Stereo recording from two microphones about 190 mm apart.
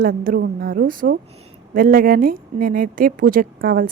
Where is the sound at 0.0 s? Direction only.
50° right (ahead or behind).